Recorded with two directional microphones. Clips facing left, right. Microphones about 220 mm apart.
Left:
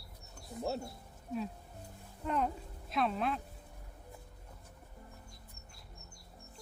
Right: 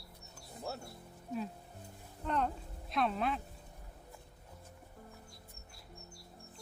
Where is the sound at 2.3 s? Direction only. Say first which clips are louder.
Left 1 dB; 5° left (ahead or behind).